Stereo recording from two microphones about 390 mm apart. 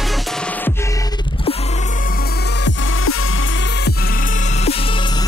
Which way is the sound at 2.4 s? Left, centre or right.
Left.